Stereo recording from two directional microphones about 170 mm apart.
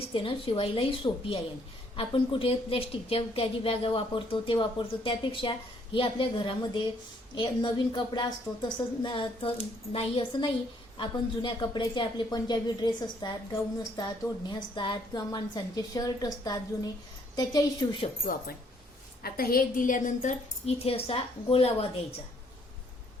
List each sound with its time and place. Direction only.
0.1 s a woman's voice: 30° left (ahead or behind)
19.2 s a woman's voice: 60° left (ahead or behind)
20.7 s a woman's voice: 35° left (ahead or behind)